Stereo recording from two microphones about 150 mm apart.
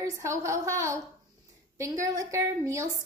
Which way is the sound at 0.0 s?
20° right (ahead or behind).